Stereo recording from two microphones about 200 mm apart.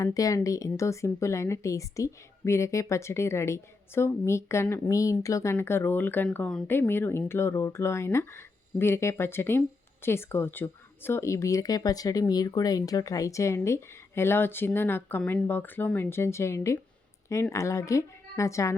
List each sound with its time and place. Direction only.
0.0 s a woman's voice: 15° left (ahead or behind)